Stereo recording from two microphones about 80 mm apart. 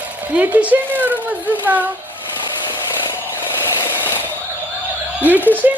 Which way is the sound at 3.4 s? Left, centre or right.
Left.